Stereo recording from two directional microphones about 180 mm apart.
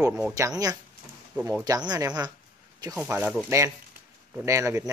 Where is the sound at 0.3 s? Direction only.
20° right (ahead or behind).